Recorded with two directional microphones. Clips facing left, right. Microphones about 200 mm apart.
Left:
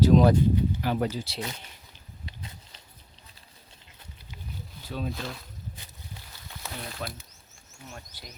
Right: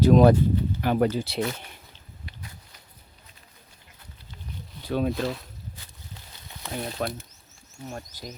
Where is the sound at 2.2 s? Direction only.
25° left (ahead or behind).